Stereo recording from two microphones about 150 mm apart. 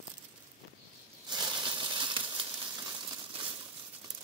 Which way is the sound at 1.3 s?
30° right (ahead or behind).